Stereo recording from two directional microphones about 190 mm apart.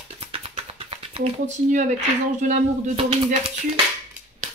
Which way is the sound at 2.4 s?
35° right (ahead or behind).